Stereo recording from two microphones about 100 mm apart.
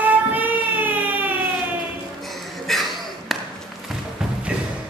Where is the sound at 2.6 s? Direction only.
Centre (ahead or behind).